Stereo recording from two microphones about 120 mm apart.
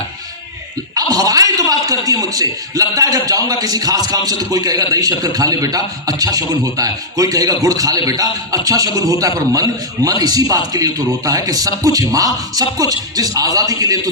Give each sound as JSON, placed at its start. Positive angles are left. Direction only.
{"t": 0.9, "sound": "a man's voice", "side_deg": -30}